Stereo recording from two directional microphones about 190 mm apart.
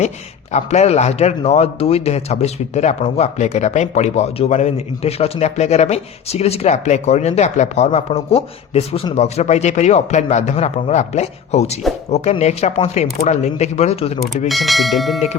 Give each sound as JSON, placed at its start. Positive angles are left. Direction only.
{"t": 0.5, "sound": "speech", "side_deg": 35}
{"t": 14.4, "sound": "speech", "side_deg": 0}